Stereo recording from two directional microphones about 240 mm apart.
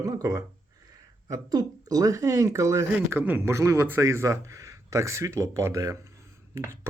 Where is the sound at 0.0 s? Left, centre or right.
Centre.